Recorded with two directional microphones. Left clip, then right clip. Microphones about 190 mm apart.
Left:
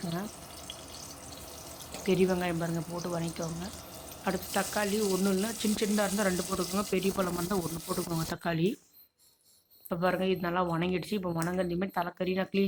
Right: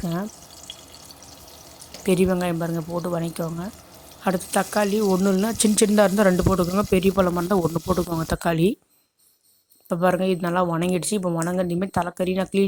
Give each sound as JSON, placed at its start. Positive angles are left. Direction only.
{"t": 2.2, "sound": "speech", "side_deg": -45}
{"t": 3.2, "sound": "speech", "side_deg": -50}
{"t": 9.9, "sound": "speech", "side_deg": -45}